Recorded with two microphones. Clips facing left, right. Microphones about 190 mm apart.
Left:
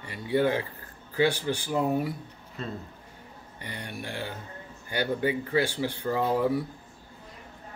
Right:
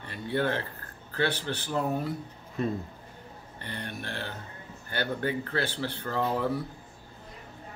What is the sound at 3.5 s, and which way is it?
Speech, 10° left (ahead or behind).